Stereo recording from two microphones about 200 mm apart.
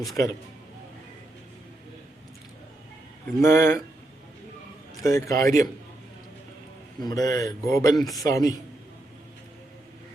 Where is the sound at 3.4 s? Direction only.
15° left (ahead or behind).